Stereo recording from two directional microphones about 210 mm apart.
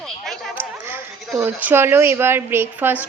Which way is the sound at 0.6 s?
10° right (ahead or behind).